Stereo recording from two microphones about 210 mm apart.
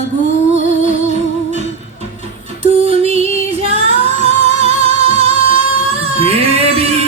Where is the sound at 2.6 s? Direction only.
30° right (ahead or behind).